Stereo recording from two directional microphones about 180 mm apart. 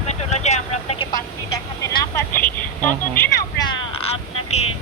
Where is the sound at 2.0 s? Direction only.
15° left (ahead or behind).